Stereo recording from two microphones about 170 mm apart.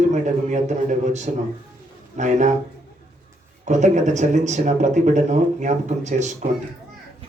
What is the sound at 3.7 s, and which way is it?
Speech, 45° right (ahead or behind).